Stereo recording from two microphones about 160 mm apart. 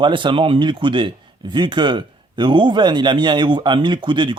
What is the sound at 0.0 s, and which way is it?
Speech, 30° right (ahead or behind).